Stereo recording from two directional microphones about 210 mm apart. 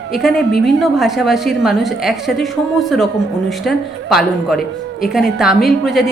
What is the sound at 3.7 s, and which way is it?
Speech, centre (ahead or behind).